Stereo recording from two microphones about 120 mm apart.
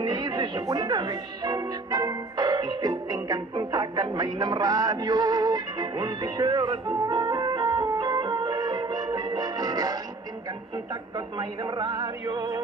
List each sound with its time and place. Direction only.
0.0 s music: 35° right (ahead or behind)
11.1 s music: 35° right (ahead or behind)